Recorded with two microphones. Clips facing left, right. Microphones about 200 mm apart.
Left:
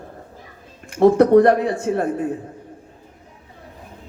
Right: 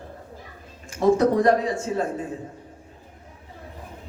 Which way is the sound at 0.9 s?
60° left (ahead or behind).